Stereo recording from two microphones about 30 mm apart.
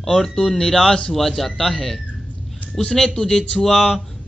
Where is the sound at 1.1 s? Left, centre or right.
Centre.